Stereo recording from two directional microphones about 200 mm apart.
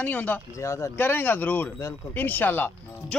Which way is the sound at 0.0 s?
10° left (ahead or behind).